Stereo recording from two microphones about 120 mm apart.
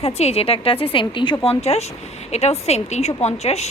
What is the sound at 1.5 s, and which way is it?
A woman's voice, 60° left (ahead or behind).